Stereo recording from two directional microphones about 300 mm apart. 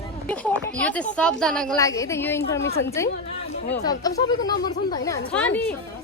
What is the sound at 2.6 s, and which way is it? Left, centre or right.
Speech, left.